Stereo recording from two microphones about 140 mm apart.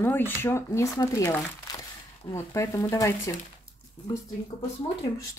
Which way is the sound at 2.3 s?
20° left (ahead or behind).